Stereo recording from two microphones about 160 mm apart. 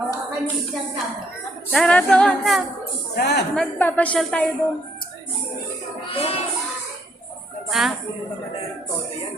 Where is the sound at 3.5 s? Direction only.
5° left (ahead or behind).